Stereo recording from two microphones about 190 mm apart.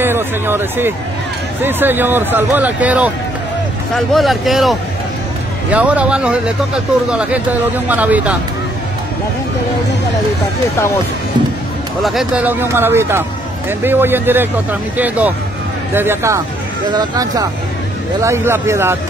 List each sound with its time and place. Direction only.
0.0 s speech: 10° right (ahead or behind)
12.0 s speech: centre (ahead or behind)